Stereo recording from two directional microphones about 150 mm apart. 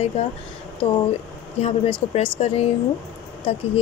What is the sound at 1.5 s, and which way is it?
A woman's voice, 40° left (ahead or behind).